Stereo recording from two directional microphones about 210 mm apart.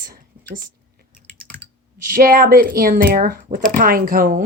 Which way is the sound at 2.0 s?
40° right (ahead or behind).